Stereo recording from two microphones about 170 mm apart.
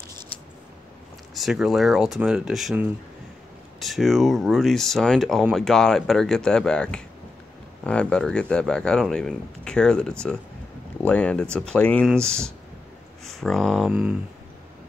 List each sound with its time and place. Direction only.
1.3 s speech: centre (ahead or behind)